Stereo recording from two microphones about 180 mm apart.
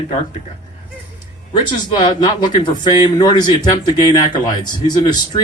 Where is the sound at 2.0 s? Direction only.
25° left (ahead or behind).